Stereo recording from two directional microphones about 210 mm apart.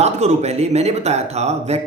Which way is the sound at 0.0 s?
30° right (ahead or behind).